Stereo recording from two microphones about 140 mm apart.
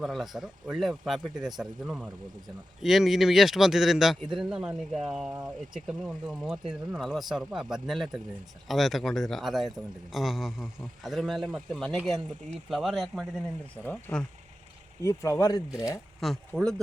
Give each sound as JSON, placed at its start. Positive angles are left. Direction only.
{"t": 0.0, "sound": "a man's voice", "side_deg": 0}
{"t": 15.0, "sound": "speech", "side_deg": 20}
{"t": 16.2, "sound": "a man's voice", "side_deg": 0}